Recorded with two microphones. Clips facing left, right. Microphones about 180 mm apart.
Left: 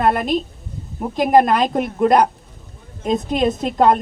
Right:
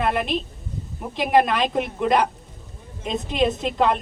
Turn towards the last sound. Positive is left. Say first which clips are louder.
# left 5 dB
turn(degrees=40)  # may be behind; listen again after turning